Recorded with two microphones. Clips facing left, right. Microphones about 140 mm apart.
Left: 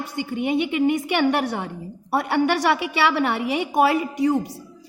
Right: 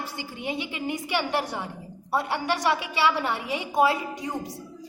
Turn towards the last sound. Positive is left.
turn(degrees=70)  # may be behind; listen again after turning